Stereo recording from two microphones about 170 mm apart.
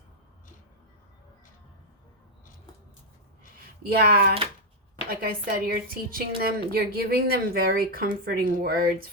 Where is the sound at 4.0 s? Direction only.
70° right (ahead or behind).